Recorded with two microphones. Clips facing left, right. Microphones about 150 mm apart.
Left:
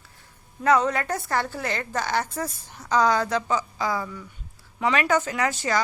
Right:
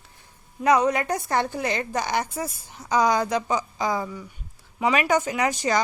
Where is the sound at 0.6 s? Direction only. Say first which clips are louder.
Right 1 dB; 15° right (ahead or behind).